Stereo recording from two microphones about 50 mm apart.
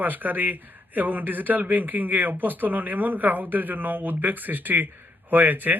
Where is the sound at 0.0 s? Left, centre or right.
Right.